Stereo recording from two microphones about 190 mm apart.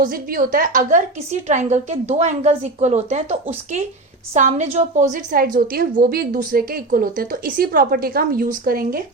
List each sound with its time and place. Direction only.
0.0 s a woman's voice: 50° right (ahead or behind)